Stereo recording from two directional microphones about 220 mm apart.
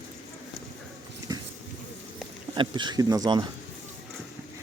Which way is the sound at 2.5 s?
20° right (ahead or behind).